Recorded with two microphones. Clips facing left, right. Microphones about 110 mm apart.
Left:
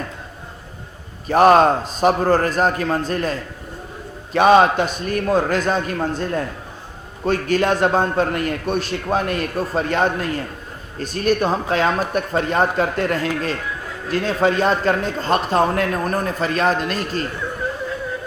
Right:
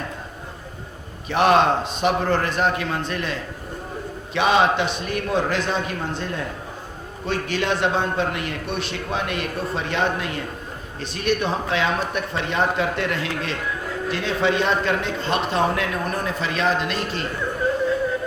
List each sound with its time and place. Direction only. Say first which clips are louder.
1.3 s a man's voice: left 5 dB; 40° left (ahead or behind)
4.4 s a man's voice: left 5 dB; 45° left (ahead or behind)